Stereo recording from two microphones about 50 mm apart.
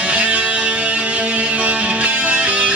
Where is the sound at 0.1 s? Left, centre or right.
Right.